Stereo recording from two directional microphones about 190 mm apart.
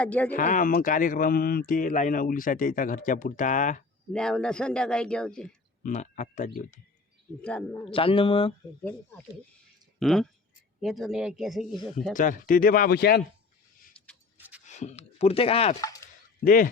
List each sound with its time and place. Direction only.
0.0 s speech: 10° left (ahead or behind)
0.3 s speech: 45° left (ahead or behind)
4.1 s a man's voice: 5° left (ahead or behind)
5.8 s speech: 40° left (ahead or behind)
7.4 s speech: 5° left (ahead or behind)
7.9 s a man's voice: 30° left (ahead or behind)
8.8 s a man's voice: 5° left (ahead or behind)
12.1 s speech: 45° left (ahead or behind)
14.0 s a sound: 5° left (ahead or behind)
14.3 s a sound: 10° right (ahead or behind)
14.6 s speech: 40° left (ahead or behind)
15.8 s speech: 20° left (ahead or behind)
16.4 s speech: 50° left (ahead or behind)